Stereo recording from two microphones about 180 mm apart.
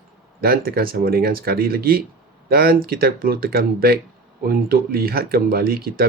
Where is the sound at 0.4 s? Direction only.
55° right (ahead or behind).